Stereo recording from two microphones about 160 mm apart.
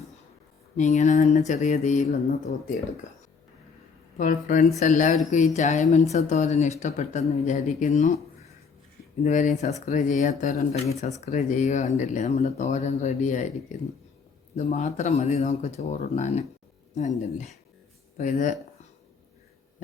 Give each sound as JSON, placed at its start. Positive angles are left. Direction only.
{"t": 0.8, "sound": "speech", "side_deg": 50}
{"t": 4.2, "sound": "speech", "side_deg": 55}
{"t": 9.2, "sound": "speech", "side_deg": 50}